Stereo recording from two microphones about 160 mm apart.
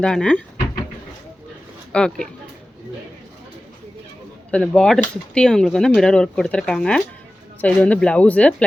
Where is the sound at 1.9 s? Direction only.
5° left (ahead or behind).